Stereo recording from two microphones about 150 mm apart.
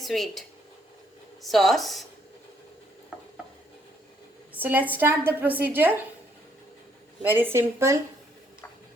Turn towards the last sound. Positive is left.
turn(degrees=-15)  # may be behind; listen again after turning